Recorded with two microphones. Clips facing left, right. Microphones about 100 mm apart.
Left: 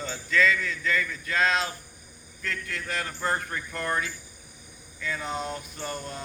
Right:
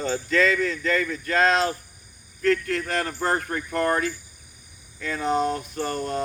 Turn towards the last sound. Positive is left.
turn(degrees=-50)  # may be behind; listen again after turning